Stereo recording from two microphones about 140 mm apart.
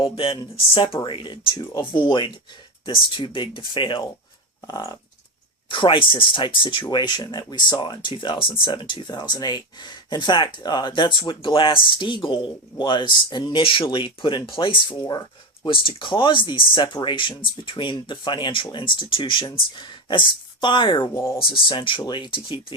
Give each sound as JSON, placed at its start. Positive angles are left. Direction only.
{"t": 0.0, "sound": "speech", "side_deg": 35}
{"t": 4.6, "sound": "a sound", "side_deg": 25}
{"t": 5.6, "sound": "speech", "side_deg": 35}